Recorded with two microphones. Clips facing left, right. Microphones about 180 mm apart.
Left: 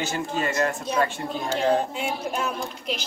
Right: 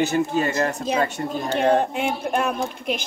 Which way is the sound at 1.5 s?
60° right (ahead or behind).